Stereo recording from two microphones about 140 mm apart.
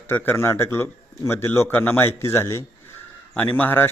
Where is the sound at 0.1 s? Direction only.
15° left (ahead or behind).